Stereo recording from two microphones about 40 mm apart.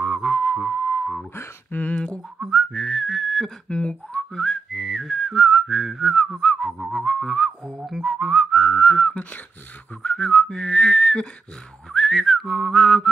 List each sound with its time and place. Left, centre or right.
0.0 s a sound: centre
1.3 s telephone dialing: left
2.5 s whistling: centre
3.6 s whistling: left
4.3 s whistling: centre
4.7 s whistling: centre
6.4 s whistling: centre
7.8 s whistling: centre